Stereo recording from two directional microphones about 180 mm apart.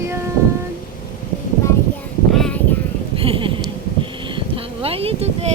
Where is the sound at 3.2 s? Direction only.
30° right (ahead or behind).